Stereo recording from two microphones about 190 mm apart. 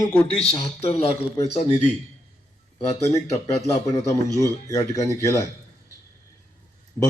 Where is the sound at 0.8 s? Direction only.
35° left (ahead or behind).